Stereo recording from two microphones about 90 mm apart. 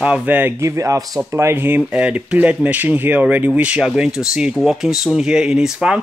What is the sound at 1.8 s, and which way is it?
Speech, 10° right (ahead or behind).